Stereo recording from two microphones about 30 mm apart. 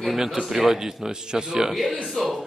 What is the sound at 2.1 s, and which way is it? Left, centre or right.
Speech, centre.